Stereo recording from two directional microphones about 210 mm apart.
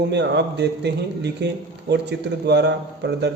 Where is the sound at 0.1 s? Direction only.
55° right (ahead or behind).